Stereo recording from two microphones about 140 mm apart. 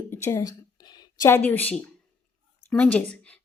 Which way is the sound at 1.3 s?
15° left (ahead or behind).